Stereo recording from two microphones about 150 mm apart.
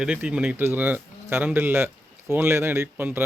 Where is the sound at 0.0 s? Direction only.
5° right (ahead or behind).